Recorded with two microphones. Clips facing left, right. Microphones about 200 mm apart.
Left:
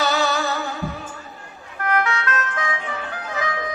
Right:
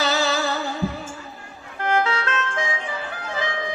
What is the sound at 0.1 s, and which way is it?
Music, 25° right (ahead or behind).